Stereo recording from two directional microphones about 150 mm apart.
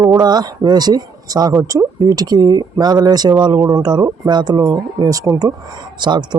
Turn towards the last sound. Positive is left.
turn(degrees=-30)  # may be behind; listen again after turning